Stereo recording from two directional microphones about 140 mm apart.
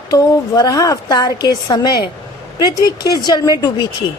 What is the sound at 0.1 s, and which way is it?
A woman's voice, 25° left (ahead or behind).